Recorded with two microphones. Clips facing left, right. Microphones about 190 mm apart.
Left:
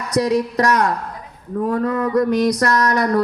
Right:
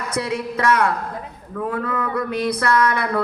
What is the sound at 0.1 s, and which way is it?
A woman's voice, 40° left (ahead or behind).